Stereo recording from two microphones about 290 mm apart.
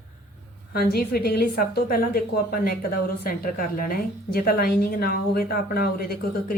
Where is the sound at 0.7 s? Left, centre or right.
Left.